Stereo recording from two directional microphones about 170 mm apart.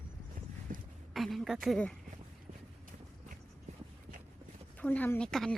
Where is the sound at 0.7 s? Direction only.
55° right (ahead or behind).